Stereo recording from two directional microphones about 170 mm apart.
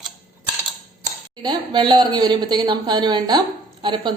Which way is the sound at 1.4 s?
25° right (ahead or behind).